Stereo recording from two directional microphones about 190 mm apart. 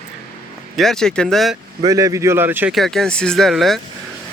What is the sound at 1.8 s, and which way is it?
Speech, 20° right (ahead or behind).